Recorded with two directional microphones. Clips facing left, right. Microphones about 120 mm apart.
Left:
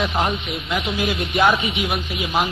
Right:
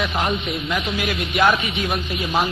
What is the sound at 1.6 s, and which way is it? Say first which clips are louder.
Speech: left 1 dB; 15° left (ahead or behind).